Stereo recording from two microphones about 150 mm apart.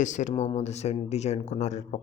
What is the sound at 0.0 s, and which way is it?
Speech, 55° left (ahead or behind).